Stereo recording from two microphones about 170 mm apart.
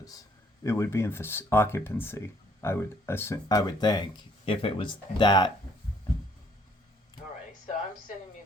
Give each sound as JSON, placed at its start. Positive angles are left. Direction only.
{"t": 0.6, "sound": "speech", "side_deg": 15}